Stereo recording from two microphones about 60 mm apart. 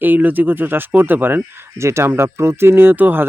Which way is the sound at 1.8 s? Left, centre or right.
Right.